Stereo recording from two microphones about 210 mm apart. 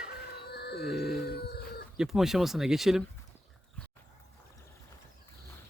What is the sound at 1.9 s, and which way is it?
Speech, centre (ahead or behind).